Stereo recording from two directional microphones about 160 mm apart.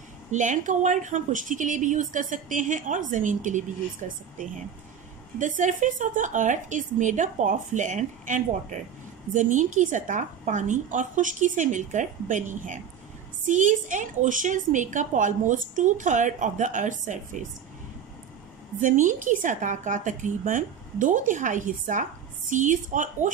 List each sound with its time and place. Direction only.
0.3 s a woman's voice: 50° right (ahead or behind)
5.4 s a woman's voice: 50° right (ahead or behind)
18.8 s a woman's voice: 55° right (ahead or behind)